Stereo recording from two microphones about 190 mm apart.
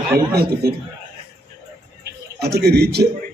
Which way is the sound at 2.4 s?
55° right (ahead or behind).